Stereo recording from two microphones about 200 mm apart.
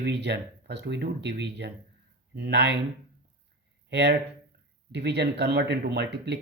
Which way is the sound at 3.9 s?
55° right (ahead or behind).